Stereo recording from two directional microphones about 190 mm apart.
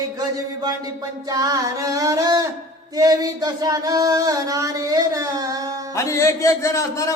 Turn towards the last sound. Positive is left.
turn(degrees=15)  # may be behind; listen again after turning